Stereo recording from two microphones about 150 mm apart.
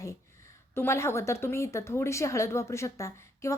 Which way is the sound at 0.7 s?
15° left (ahead or behind).